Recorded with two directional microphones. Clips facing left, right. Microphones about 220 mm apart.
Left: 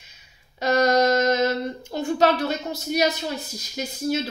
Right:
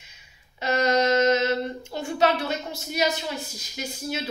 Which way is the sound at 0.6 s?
40° left (ahead or behind).